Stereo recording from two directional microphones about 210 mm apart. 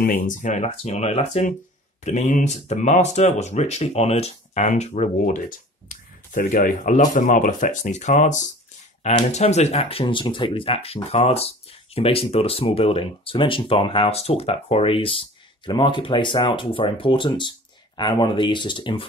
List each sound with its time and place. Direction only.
0.0 s speech: 35° left (ahead or behind)